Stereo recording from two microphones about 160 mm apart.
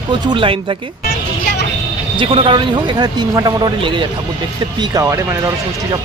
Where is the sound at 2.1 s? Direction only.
35° right (ahead or behind).